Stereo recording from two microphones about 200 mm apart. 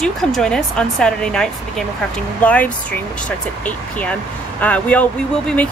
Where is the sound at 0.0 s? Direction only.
5° left (ahead or behind).